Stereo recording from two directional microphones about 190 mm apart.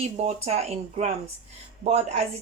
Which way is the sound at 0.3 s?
35° right (ahead or behind).